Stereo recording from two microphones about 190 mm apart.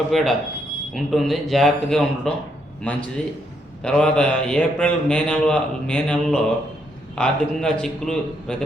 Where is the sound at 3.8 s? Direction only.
5° left (ahead or behind).